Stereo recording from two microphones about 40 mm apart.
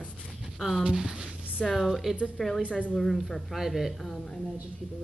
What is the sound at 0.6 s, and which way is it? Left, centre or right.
Speech, centre.